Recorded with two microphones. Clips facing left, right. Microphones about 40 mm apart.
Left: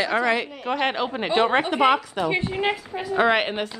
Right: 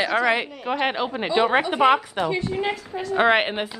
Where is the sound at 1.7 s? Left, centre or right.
Centre.